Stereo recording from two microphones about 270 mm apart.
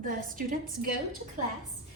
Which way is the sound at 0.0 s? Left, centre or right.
Right.